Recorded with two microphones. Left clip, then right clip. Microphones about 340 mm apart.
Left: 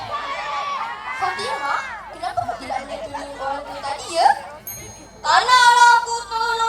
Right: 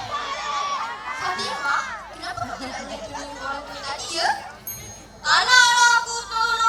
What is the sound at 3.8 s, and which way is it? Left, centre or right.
Children playing, centre.